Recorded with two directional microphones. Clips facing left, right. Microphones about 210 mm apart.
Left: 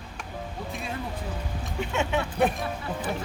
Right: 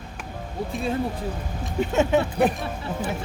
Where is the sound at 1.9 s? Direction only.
40° right (ahead or behind).